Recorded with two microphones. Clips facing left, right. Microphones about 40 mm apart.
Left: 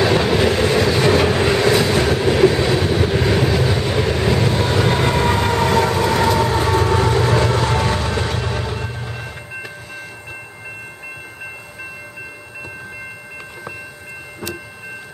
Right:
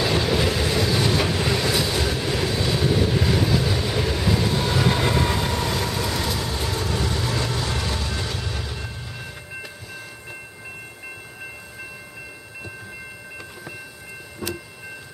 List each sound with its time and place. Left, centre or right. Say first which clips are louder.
0.0 s train: left 6 dB; left
3.7 s vehicle: left 5 dB; left
4.7 s train: left 3 dB; centre
5.6 s train: left 9 dB; left